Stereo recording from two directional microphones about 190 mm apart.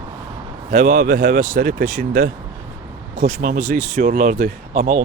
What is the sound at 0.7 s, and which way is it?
Speech, 40° right (ahead or behind).